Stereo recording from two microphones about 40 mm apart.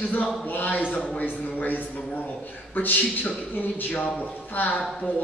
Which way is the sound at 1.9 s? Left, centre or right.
Left.